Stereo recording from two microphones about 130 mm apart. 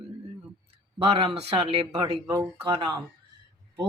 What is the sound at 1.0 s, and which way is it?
Speech, 45° right (ahead or behind).